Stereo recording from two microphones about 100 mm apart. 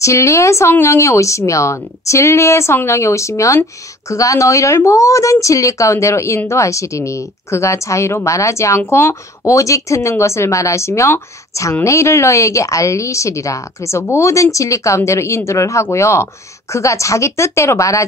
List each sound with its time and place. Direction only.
0.0 s a woman's voice: 30° left (ahead or behind)